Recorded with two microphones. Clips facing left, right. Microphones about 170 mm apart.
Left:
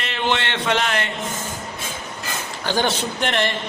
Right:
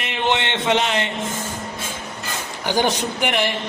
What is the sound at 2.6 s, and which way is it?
Speech, 15° right (ahead or behind).